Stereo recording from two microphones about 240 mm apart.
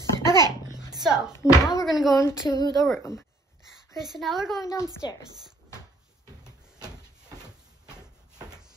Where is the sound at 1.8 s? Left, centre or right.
Centre.